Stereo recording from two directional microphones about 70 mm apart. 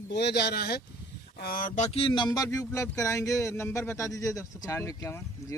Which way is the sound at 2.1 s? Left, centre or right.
Left.